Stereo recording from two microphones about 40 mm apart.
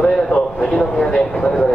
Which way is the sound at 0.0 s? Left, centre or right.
Left.